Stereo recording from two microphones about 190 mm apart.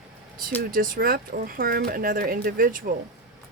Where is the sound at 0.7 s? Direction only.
50° right (ahead or behind).